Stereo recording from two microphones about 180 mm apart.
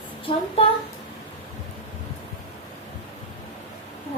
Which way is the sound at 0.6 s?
35° left (ahead or behind).